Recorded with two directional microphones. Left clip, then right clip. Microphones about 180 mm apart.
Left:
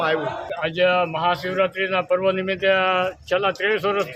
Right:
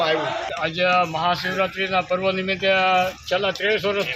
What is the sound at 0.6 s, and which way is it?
A man's voice, 35° left (ahead or behind).